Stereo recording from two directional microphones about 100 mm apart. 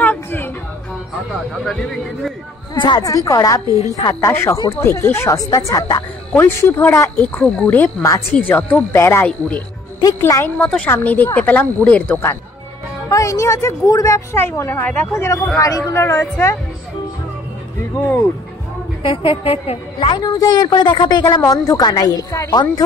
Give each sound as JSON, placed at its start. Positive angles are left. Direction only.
{"t": 0.0, "sound": "music", "side_deg": 20}
{"t": 1.7, "sound": "speech", "side_deg": 5}
{"t": 2.7, "sound": "a woman's voice", "side_deg": 50}
{"t": 3.6, "sound": "a woman's voice", "side_deg": -40}
{"t": 4.1, "sound": "a woman's voice", "side_deg": 25}
{"t": 6.3, "sound": "speech", "side_deg": 25}
{"t": 10.6, "sound": "speech", "side_deg": 10}
{"t": 13.1, "sound": "a woman's voice", "side_deg": 30}
{"t": 19.0, "sound": "a woman's voice", "side_deg": 65}
{"t": 20.2, "sound": "speech", "side_deg": 40}
{"t": 20.6, "sound": "a woman's voice", "side_deg": 55}